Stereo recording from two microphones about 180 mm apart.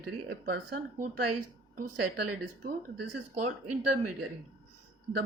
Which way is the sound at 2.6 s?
55° right (ahead or behind).